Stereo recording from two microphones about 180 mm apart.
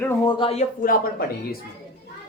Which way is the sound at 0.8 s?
55° left (ahead or behind).